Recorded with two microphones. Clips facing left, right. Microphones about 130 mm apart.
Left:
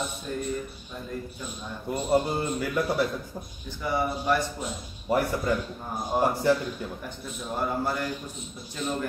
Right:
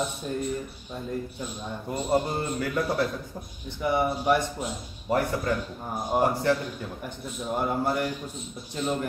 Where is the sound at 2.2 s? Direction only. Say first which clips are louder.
Left 1 dB; centre (ahead or behind).